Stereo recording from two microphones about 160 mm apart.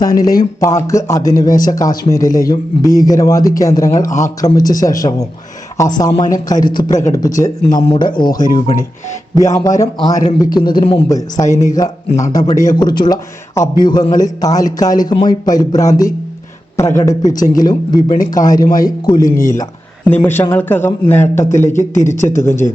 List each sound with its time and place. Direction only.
0.0 s speech: 25° left (ahead or behind)
7.8 s speech: 30° left (ahead or behind)
11.1 s speech: 20° left (ahead or behind)
19.1 s speech: 55° left (ahead or behind)
20.1 s speech: 15° left (ahead or behind)